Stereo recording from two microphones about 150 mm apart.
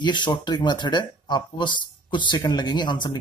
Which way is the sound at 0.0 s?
30° left (ahead or behind).